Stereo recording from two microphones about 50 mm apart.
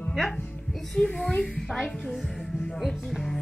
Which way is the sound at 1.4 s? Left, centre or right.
Centre.